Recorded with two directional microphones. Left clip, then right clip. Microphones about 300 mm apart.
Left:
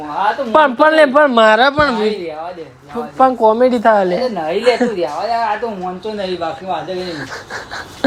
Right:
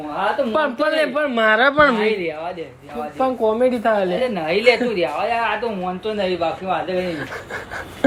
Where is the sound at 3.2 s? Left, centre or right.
Centre.